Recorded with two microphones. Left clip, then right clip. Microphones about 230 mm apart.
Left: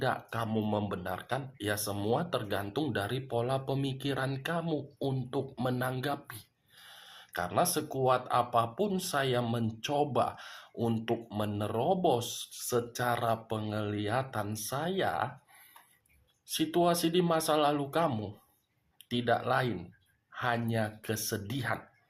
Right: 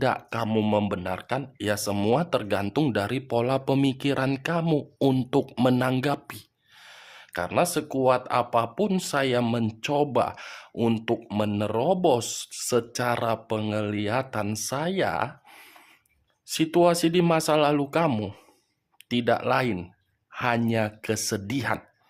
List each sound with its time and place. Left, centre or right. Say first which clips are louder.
0.0 s speech: right 7 dB; right
16.5 s speech: right 7 dB; right